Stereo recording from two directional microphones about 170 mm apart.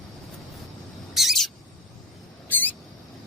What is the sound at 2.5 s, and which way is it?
Rodents, 10° left (ahead or behind).